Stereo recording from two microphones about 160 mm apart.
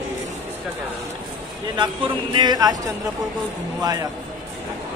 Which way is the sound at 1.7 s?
30° right (ahead or behind).